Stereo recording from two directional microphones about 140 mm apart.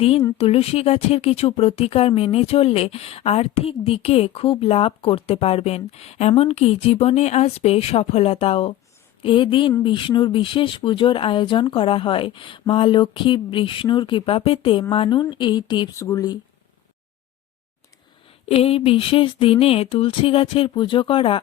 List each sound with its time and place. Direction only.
0.3 s speech: 45° left (ahead or behind); by 16.4 s 25° left (ahead or behind)
18.4 s speech: 45° left (ahead or behind)